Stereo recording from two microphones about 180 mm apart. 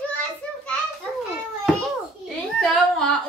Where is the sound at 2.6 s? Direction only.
Centre (ahead or behind).